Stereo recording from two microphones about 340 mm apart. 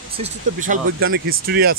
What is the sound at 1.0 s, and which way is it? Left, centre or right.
Speech, right.